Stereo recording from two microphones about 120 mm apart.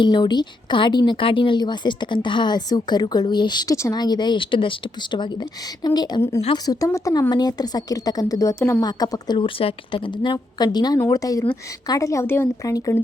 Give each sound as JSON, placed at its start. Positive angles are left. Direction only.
{"t": 0.0, "sound": "speech", "side_deg": 40}
{"t": 8.8, "sound": "speech", "side_deg": 35}